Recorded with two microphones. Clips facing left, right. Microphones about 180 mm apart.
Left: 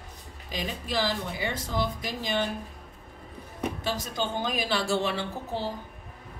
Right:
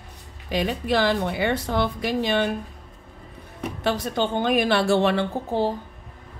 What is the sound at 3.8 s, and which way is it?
Speech, 65° right (ahead or behind).